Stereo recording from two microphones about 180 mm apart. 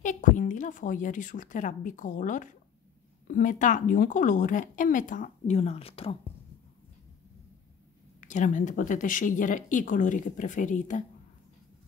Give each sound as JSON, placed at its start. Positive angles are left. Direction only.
{"t": 0.0, "sound": "a woman's voice", "side_deg": 45}
{"t": 8.2, "sound": "speech", "side_deg": 45}